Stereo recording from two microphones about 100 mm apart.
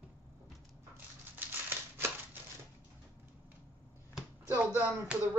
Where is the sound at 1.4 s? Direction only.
20° right (ahead or behind).